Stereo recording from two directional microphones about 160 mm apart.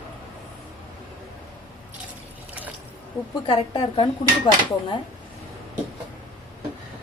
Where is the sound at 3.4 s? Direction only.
30° left (ahead or behind).